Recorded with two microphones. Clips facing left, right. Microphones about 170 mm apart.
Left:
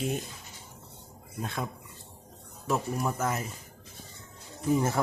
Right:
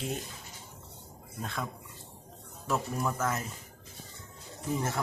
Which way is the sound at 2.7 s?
15° left (ahead or behind).